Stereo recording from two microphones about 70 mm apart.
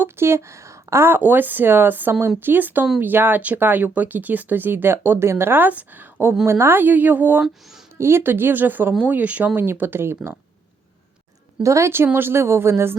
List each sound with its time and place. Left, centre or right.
0.0 s speech: right
7.9 s a woman's voice: right
11.6 s a woman's voice: right